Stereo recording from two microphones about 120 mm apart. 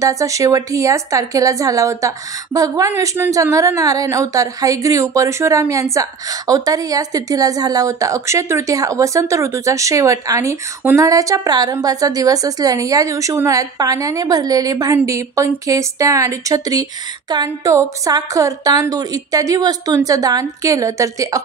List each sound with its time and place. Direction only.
0.0 s a woman's voice: 25° right (ahead or behind)